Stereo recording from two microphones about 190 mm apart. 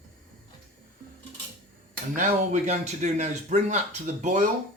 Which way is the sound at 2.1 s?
40° right (ahead or behind).